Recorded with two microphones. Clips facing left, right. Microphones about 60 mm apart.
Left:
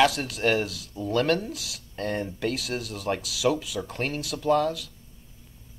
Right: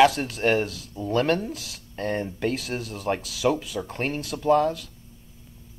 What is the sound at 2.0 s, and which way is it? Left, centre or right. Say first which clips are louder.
Speech: right 2 dB; right.